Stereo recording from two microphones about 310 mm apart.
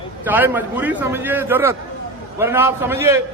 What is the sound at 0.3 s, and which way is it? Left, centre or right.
A man's voice, centre.